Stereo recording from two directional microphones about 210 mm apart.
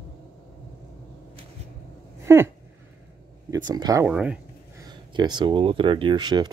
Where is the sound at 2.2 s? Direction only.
15° right (ahead or behind).